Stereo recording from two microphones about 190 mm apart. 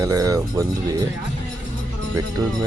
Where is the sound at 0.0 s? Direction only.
15° right (ahead or behind).